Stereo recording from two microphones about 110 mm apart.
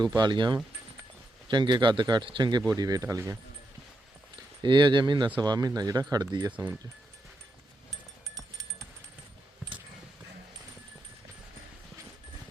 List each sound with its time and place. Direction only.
0.2 s speech: 45° right (ahead or behind); by 3.3 s 30° right (ahead or behind)
4.6 s speech: 45° right (ahead or behind)